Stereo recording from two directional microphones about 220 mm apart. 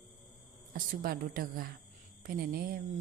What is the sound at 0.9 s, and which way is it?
Speech, 40° right (ahead or behind).